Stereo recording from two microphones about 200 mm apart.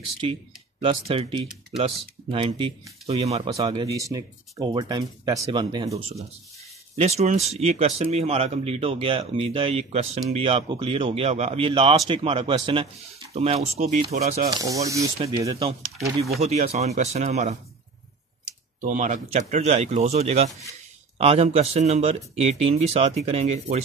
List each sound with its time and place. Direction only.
0.8 s speech: 25° right (ahead or behind)
14.5 s speech: 15° right (ahead or behind)
15.1 s speech: 30° right (ahead or behind)
18.8 s speech: 40° right (ahead or behind)